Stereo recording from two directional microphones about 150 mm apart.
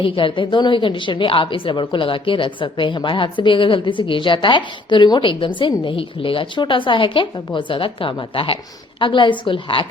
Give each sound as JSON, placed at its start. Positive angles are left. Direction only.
{"t": 0.0, "sound": "a woman's voice", "side_deg": 35}